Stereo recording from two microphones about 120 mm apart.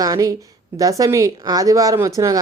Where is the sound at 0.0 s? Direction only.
30° right (ahead or behind).